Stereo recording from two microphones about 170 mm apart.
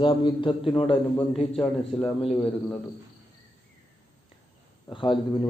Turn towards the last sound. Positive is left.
turn(degrees=30)  # may be behind; listen again after turning